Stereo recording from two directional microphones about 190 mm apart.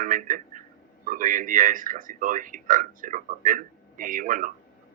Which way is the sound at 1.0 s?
45° right (ahead or behind).